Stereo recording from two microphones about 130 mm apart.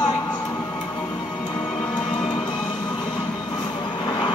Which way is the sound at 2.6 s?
10° left (ahead or behind).